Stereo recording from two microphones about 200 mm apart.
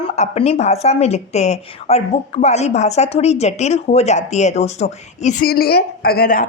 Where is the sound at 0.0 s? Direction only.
30° left (ahead or behind).